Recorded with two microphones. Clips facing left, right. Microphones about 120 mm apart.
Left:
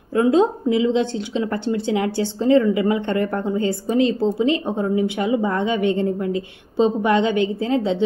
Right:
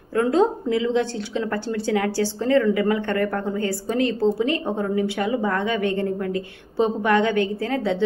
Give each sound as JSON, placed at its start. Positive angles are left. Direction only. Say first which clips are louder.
{"t": 0.1, "sound": "a woman's voice", "louder": "left 3 dB", "side_deg": 20}